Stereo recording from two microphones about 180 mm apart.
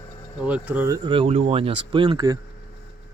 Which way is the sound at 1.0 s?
30° right (ahead or behind).